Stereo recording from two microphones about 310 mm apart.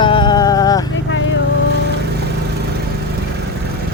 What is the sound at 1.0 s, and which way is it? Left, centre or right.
Vehicle, left.